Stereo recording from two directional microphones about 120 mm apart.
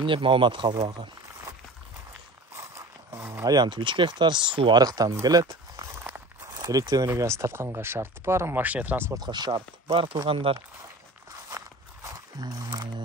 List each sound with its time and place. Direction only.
0.0 s speech: 45° right (ahead or behind)
3.1 s a sound: 20° right (ahead or behind)
3.4 s speech: 35° right (ahead or behind); by 9.0 s 15° right (ahead or behind)
9.1 s speech: 35° right (ahead or behind)
9.8 s speech: 50° right (ahead or behind)
11.5 s a sound: 30° right (ahead or behind)